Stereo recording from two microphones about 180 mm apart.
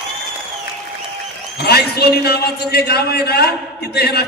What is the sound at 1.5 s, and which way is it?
A man's voice, 60° left (ahead or behind).